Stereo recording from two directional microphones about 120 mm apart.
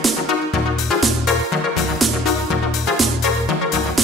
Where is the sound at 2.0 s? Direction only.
Centre (ahead or behind).